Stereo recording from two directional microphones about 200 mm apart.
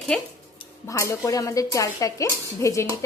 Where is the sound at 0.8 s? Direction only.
15° left (ahead or behind).